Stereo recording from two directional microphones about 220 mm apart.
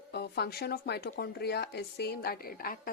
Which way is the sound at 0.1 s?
50° left (ahead or behind).